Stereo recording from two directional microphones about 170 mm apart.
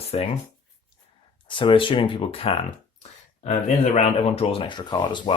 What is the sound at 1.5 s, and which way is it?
Speech, 30° left (ahead or behind).